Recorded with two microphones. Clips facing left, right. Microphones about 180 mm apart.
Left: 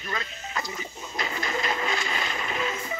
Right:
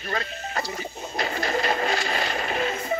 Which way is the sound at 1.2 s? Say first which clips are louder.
Right 4 dB; 35° right (ahead or behind).